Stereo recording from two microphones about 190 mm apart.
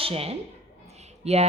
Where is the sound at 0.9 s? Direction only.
35° right (ahead or behind).